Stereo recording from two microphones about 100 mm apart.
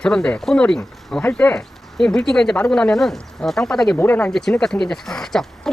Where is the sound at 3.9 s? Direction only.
15° left (ahead or behind).